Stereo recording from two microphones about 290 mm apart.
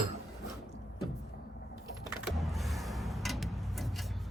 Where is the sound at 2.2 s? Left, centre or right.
Centre.